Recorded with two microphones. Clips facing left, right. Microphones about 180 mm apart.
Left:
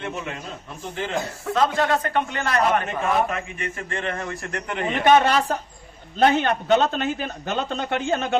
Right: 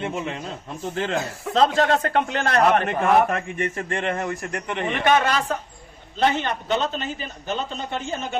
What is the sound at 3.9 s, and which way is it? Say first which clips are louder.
Speech: right 2 dB; 25° right (ahead or behind).